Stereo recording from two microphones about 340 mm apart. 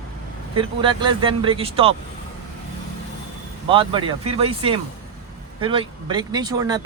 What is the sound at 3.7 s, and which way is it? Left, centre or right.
Speech, centre.